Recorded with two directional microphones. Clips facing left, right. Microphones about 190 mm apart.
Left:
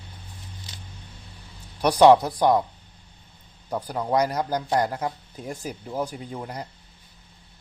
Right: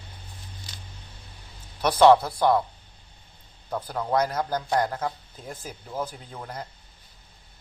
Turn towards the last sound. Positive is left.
turn(degrees=15)  # may be behind; listen again after turning